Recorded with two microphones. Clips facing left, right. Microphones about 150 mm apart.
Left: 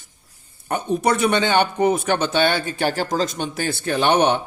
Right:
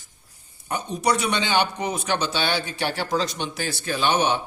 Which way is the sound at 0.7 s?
55° left (ahead or behind).